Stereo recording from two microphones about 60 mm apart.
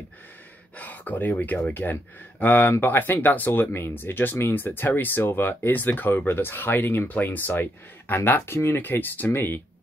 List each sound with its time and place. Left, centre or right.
0.7 s speech: left